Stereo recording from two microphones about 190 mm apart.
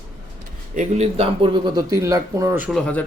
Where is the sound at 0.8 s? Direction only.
35° right (ahead or behind); by 2.6 s 15° right (ahead or behind).